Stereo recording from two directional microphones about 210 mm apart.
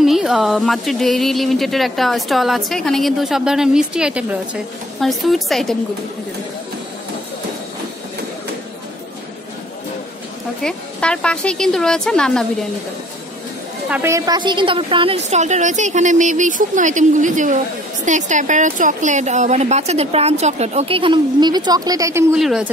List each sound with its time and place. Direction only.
0.0 s speech: centre (ahead or behind)
10.6 s speech: 5° left (ahead or behind)
13.8 s speech: 10° right (ahead or behind)
22.3 s speech: centre (ahead or behind)